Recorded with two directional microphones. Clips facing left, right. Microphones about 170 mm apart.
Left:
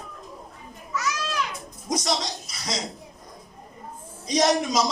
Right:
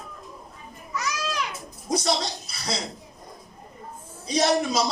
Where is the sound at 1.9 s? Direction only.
30° right (ahead or behind).